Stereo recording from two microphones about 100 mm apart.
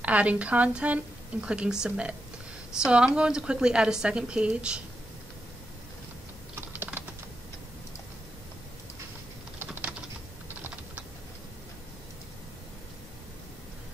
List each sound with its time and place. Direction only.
0.0 s a woman's voice: 15° right (ahead or behind)
6.5 s typing: 20° right (ahead or behind)
9.6 s typing: 15° right (ahead or behind)